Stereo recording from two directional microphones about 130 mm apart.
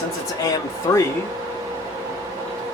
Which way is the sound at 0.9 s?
25° left (ahead or behind).